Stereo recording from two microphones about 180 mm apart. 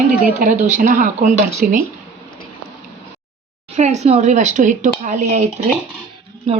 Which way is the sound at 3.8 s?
40° right (ahead or behind).